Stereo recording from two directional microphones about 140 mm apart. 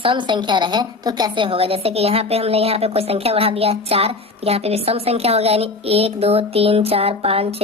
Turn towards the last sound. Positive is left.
turn(degrees=-45)  # may be behind; listen again after turning